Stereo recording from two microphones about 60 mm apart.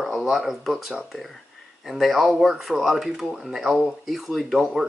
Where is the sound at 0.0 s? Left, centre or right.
Centre.